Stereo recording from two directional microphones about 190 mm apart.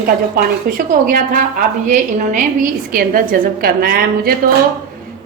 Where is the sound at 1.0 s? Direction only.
45° right (ahead or behind).